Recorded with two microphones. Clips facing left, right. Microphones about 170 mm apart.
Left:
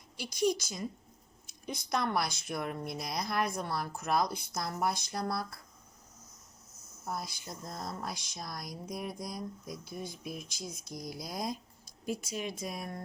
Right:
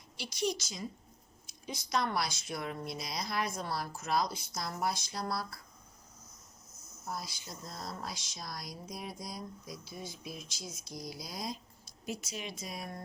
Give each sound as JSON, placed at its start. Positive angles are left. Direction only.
{"t": 0.2, "sound": "a woman's voice", "side_deg": 50}
{"t": 7.0, "sound": "speech", "side_deg": 55}